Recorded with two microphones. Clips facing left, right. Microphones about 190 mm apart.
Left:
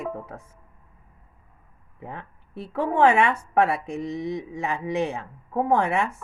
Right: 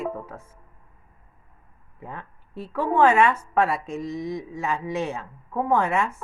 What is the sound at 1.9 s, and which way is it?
Speech, 20° left (ahead or behind).